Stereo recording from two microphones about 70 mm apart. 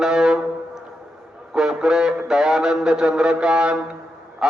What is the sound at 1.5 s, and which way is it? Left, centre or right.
A man's voice, centre.